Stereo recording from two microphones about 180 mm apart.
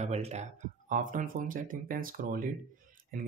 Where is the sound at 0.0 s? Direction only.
40° right (ahead or behind).